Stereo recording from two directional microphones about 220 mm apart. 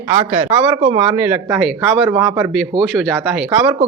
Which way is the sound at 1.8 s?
15° right (ahead or behind).